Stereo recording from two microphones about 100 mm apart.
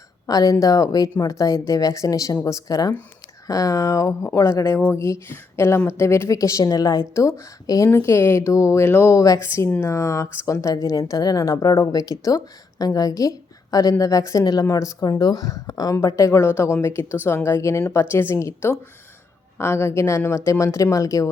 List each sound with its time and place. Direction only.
0.3 s a woman's voice: 40° left (ahead or behind)